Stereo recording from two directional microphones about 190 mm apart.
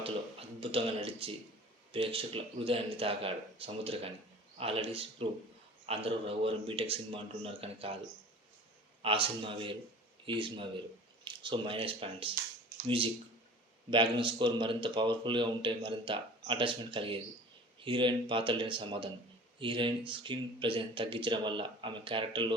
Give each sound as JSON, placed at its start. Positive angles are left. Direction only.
{"t": 0.0, "sound": "a sound", "side_deg": -30}
{"t": 1.9, "sound": "a man's voice", "side_deg": -30}
{"t": 9.0, "sound": "a man's voice", "side_deg": -30}
{"t": 13.9, "sound": "a man's voice", "side_deg": -25}